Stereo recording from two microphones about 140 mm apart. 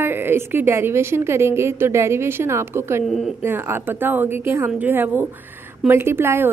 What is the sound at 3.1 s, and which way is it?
Speech, centre (ahead or behind).